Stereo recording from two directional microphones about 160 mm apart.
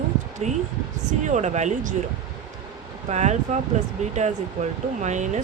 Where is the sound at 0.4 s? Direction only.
45° right (ahead or behind).